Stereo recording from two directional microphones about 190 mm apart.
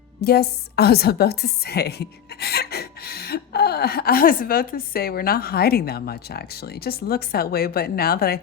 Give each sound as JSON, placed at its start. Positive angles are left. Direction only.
{"t": 0.2, "sound": "a woman's voice", "side_deg": 55}